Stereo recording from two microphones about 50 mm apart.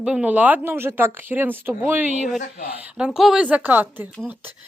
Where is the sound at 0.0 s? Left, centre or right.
Centre.